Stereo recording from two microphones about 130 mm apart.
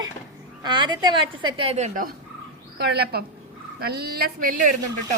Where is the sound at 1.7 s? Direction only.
75° right (ahead or behind).